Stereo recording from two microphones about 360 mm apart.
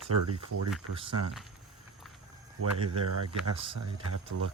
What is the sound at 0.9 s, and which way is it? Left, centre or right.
Speech, centre.